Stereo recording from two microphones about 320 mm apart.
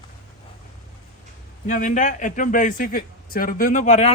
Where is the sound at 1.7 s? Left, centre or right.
Left.